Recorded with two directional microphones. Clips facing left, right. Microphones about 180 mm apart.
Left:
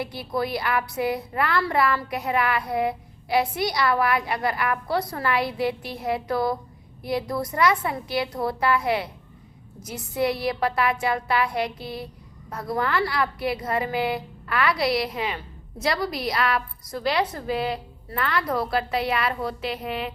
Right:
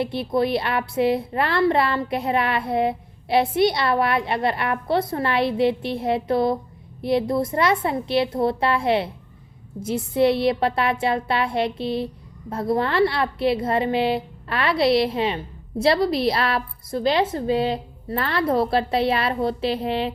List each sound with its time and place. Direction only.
0.0 s a woman's voice: 25° right (ahead or behind)